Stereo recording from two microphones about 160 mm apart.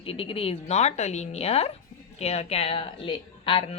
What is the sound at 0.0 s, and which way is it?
A woman's voice, 35° left (ahead or behind).